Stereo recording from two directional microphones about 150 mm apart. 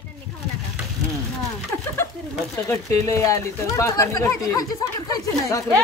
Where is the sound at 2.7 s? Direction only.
20° left (ahead or behind).